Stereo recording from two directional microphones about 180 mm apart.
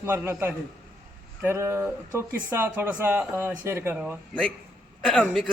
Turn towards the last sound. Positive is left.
turn(degrees=0)  # may be behind; listen again after turning